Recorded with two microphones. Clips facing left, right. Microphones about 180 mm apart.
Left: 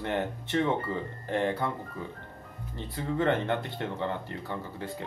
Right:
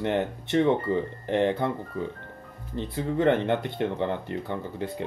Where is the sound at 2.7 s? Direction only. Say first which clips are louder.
Right 4 dB; 20° right (ahead or behind).